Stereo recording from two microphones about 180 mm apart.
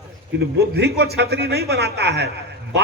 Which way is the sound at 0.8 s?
65° right (ahead or behind).